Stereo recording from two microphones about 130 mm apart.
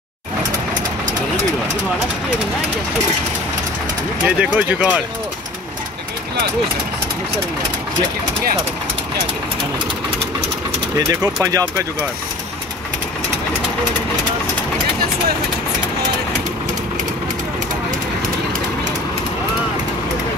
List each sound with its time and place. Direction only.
4.4 s speech: 10° right (ahead or behind)
11.1 s speech: 20° right (ahead or behind)